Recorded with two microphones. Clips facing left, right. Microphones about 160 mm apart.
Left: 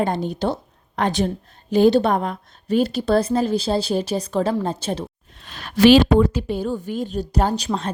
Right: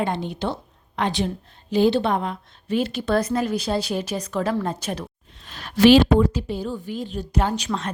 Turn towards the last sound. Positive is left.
turn(degrees=35)  # may be behind; listen again after turning